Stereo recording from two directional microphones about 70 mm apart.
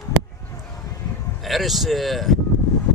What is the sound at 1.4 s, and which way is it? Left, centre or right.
Speech, centre.